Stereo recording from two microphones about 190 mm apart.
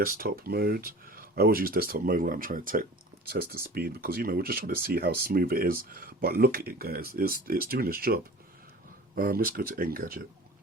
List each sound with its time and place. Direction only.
0.0 s speech: 50° right (ahead or behind)